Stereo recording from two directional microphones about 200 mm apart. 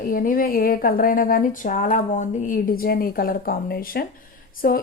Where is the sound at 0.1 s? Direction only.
45° left (ahead or behind).